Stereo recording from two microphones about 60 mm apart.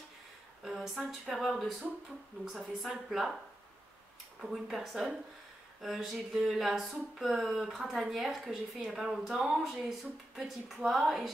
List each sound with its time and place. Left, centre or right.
0.7 s speech: centre
4.4 s speech: centre